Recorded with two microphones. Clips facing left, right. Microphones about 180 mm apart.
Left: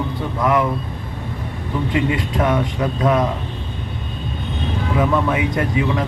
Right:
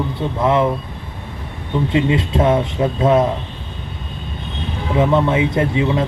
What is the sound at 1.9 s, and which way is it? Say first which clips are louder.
A man's voice: right 3 dB; 25° right (ahead or behind).